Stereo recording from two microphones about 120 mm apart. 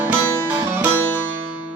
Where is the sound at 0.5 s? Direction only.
15° right (ahead or behind).